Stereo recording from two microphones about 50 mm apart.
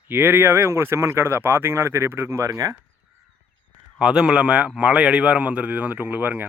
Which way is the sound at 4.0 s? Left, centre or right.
Centre.